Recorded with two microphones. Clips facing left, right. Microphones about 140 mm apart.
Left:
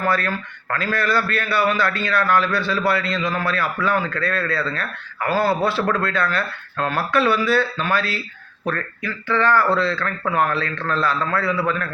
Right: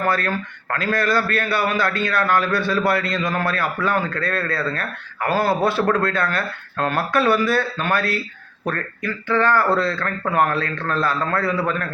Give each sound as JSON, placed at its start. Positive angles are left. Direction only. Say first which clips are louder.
{"t": 0.0, "sound": "a man's voice", "louder": "even", "side_deg": -50}